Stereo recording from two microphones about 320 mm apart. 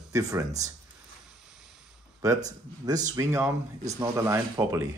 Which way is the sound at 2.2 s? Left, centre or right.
Centre.